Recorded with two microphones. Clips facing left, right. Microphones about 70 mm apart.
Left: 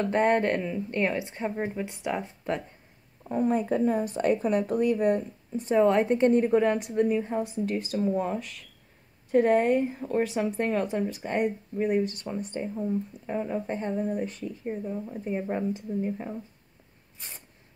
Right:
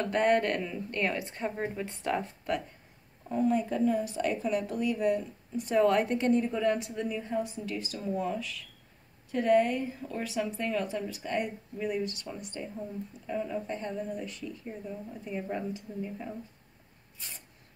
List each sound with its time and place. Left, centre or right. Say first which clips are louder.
0.0 s a woman's voice: left 2 dB; left
3.3 s speech: left 2 dB; left
5.7 s a woman's voice: left 3 dB; left
6.3 s speech: left 5 dB; left
7.4 s speech: left 7 dB; left